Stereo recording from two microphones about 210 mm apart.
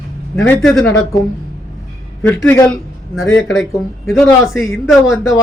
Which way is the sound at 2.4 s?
15° left (ahead or behind).